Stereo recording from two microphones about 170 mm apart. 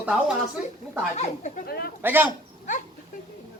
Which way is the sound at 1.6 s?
65° left (ahead or behind).